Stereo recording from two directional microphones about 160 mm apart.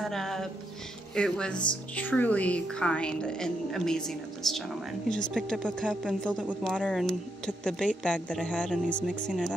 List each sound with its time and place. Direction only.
0.0 s a woman's voice: centre (ahead or behind)